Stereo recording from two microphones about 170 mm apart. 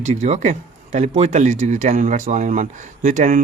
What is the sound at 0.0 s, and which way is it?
Speech, 45° right (ahead or behind).